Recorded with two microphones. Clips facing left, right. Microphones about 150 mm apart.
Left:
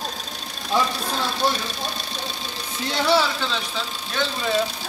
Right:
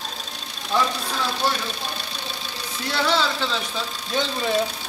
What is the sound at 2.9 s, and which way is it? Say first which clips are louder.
Music: left 2 dB; 15° left (ahead or behind).